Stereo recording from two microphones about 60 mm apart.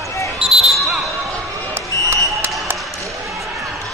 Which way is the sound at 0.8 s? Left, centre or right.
Centre.